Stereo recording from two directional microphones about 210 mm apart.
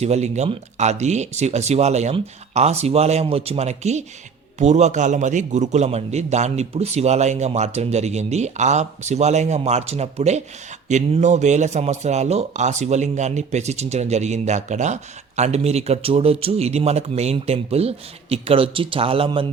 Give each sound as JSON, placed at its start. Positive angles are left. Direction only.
{"t": 0.0, "sound": "a man's voice", "side_deg": -30}